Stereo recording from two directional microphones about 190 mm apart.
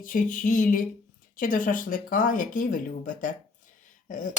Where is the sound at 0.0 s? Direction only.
45° left (ahead or behind).